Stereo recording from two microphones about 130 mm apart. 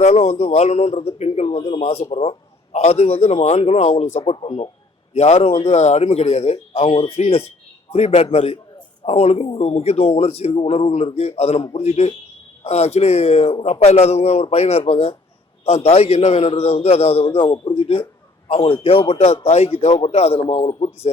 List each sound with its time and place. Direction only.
0.0 s a man's voice: 55° left (ahead or behind)
1.5 s a man's voice: 40° left (ahead or behind); by 4.2 s 65° left (ahead or behind)
4.2 s a man's voice: 45° left (ahead or behind)
5.1 s a man's voice: 60° left (ahead or behind)